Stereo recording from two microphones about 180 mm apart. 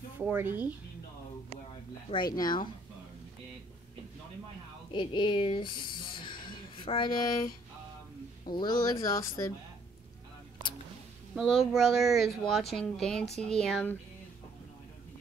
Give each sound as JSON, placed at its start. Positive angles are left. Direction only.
{"t": 0.2, "sound": "speech", "side_deg": -10}
{"t": 2.0, "sound": "speech", "side_deg": 25}
{"t": 4.9, "sound": "speech", "side_deg": 25}
{"t": 6.2, "sound": "a sound", "side_deg": 25}
{"t": 8.5, "sound": "speech", "side_deg": 25}
{"t": 11.3, "sound": "speech", "side_deg": 0}